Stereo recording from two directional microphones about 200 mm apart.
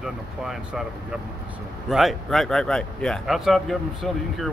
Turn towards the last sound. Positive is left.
turn(degrees=0)  # may be behind; listen again after turning